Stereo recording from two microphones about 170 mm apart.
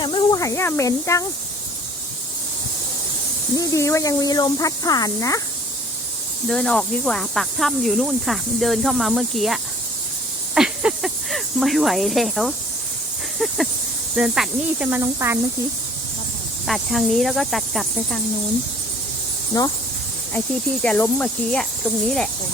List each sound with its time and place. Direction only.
0.0 s speech: 30° left (ahead or behind)
3.5 s speech: 20° left (ahead or behind)
6.5 s speech: 5° left (ahead or behind)
10.5 s a sound: 5° right (ahead or behind)
13.4 s speech: centre (ahead or behind)
16.6 s speech: centre (ahead or behind)
19.5 s speech: 20° left (ahead or behind)
20.8 s speech: 10° left (ahead or behind)